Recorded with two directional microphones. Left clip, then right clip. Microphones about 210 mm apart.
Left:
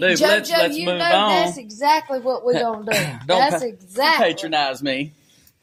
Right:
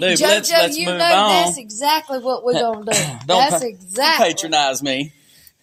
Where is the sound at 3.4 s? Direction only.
35° right (ahead or behind).